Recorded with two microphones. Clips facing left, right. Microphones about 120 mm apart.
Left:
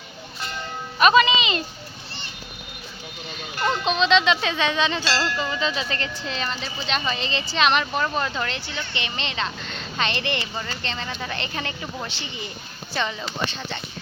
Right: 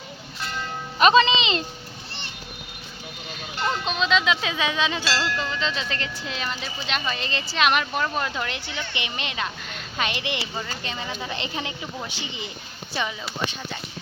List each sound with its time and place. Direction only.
0.9 s speech: 25° right (ahead or behind)
3.8 s speech: 5° right (ahead or behind)